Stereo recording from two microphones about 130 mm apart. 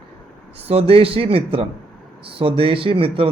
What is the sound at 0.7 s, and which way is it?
A man's voice, 50° right (ahead or behind).